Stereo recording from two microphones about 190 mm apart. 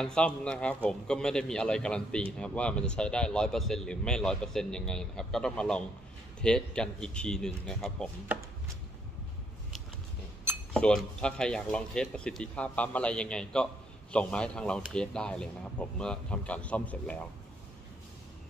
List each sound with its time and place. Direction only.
0.0 s speech: 5° left (ahead or behind)
10.7 s speech: 5° left (ahead or behind)